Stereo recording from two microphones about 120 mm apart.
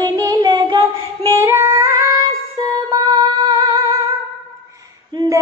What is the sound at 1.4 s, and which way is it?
Female singing, 25° right (ahead or behind).